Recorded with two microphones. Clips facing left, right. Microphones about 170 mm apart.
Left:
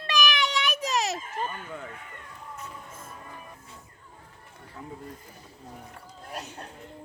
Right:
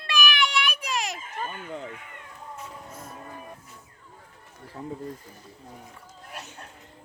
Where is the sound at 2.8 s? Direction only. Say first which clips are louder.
Right 3 dB; 30° right (ahead or behind).